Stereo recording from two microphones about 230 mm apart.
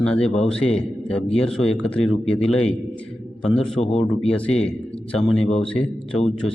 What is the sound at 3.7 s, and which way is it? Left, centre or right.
Speech, left.